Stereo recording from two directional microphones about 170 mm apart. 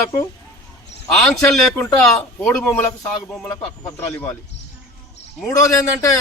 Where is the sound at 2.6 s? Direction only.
15° left (ahead or behind).